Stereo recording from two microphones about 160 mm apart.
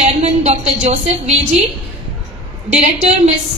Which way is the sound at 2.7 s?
45° right (ahead or behind).